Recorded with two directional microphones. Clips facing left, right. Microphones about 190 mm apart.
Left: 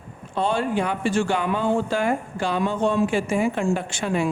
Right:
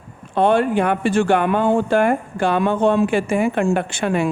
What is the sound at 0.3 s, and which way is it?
Speech, 60° right (ahead or behind).